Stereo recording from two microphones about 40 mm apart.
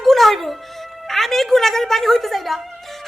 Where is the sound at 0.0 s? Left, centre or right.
Centre.